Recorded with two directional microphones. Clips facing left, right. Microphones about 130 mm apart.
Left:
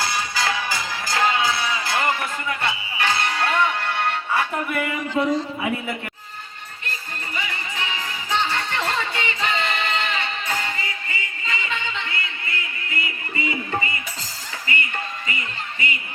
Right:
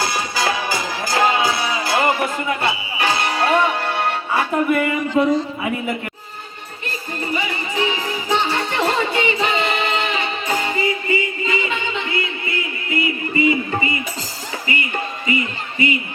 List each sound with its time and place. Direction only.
0.1 s music: 15° right (ahead or behind)
0.7 s music: 30° right (ahead or behind)
1.2 s music: 15° right (ahead or behind); by 4.9 s 35° right (ahead or behind)
6.8 s music: 15° right (ahead or behind)